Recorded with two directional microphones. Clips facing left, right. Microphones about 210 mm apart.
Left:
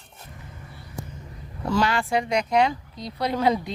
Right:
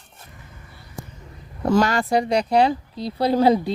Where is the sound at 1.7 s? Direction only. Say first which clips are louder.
Right 5 dB; 45° right (ahead or behind).